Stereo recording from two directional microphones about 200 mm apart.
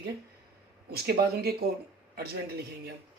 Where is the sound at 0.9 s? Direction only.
50° right (ahead or behind).